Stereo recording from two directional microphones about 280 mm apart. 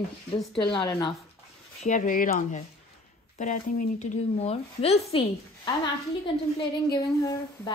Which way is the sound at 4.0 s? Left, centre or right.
Left.